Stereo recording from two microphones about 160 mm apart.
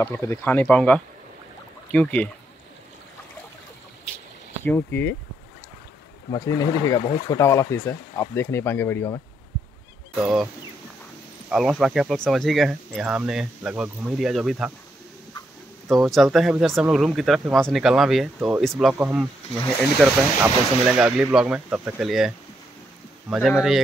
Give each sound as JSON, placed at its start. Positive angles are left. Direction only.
{"t": 0.0, "sound": "speech", "side_deg": 15}
{"t": 4.6, "sound": "speech", "side_deg": 15}
{"t": 6.3, "sound": "speech", "side_deg": 20}
{"t": 10.2, "sound": "speech", "side_deg": -5}
{"t": 15.9, "sound": "speech", "side_deg": 0}
{"t": 23.4, "sound": "speech", "side_deg": 0}